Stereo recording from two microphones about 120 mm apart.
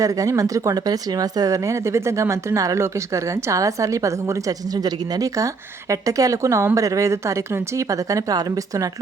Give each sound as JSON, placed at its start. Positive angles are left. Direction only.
{"t": 0.0, "sound": "speech", "side_deg": -25}